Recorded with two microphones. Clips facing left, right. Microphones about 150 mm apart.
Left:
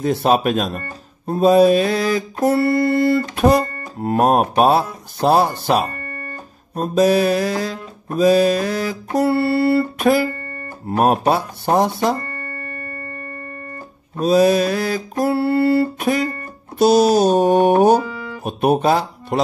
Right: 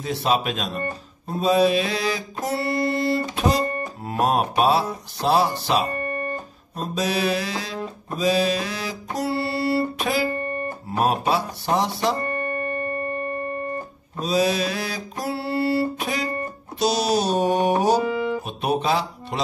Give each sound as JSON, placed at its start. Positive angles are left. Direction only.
{"t": 0.0, "sound": "mantra", "side_deg": 50}
{"t": 5.9, "sound": "music", "side_deg": -20}
{"t": 6.7, "sound": "mantra", "side_deg": 50}
{"t": 10.0, "sound": "speech", "side_deg": 55}
{"t": 10.4, "sound": "guitar", "side_deg": -20}
{"t": 10.9, "sound": "mantra", "side_deg": 50}
{"t": 12.2, "sound": "music", "side_deg": -25}
{"t": 14.2, "sound": "mantra", "side_deg": 50}
{"t": 18.0, "sound": "music", "side_deg": -25}
{"t": 18.4, "sound": "speech", "side_deg": 50}